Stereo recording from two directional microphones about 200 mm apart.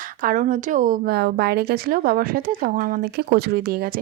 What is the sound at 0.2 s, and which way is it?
A woman's voice, 40° right (ahead or behind).